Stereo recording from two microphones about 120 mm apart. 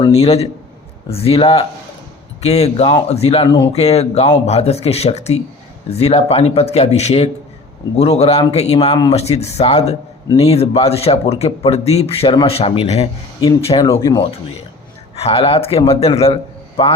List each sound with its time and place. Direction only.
0.1 s speech: 60° left (ahead or behind)
2.4 s speech: 60° left (ahead or behind)
3.4 s speech: 40° left (ahead or behind)
3.7 s speech: 60° left (ahead or behind)
14.0 s speech: 35° left (ahead or behind)
15.1 s a man's voice: 55° left (ahead or behind)